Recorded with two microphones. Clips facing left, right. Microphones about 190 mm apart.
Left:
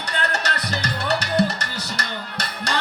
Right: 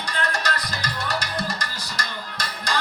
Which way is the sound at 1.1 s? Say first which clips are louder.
Left 9 dB; 70° left (ahead or behind).